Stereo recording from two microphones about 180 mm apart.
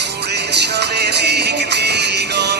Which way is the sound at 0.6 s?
70° right (ahead or behind).